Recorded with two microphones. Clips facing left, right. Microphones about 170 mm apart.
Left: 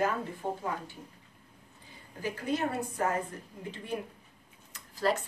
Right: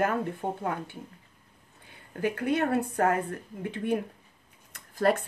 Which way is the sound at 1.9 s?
60° right (ahead or behind).